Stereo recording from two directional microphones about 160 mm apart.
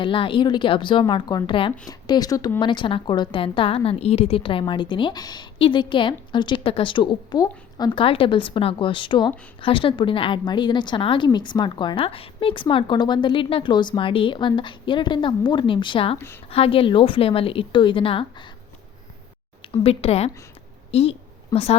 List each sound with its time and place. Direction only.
0.0 s a woman's voice: 30° left (ahead or behind)
16.1 s a woman's voice: 15° left (ahead or behind)
16.5 s a woman's voice: 35° left (ahead or behind)
19.6 s a woman's voice: 35° left (ahead or behind)
20.9 s a sound: 40° left (ahead or behind)